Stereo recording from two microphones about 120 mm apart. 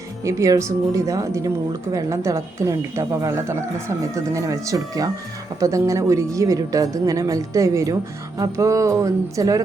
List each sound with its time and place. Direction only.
0.3 s a woman's voice: 25° right (ahead or behind)